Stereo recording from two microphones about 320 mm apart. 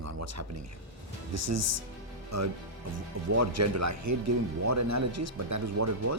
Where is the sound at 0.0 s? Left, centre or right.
Right.